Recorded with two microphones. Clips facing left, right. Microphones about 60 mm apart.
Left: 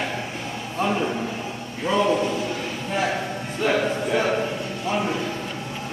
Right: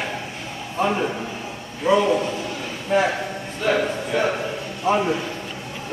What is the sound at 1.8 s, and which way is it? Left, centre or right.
Speech, centre.